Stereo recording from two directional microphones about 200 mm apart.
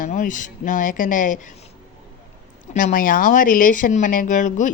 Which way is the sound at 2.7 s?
40° left (ahead or behind).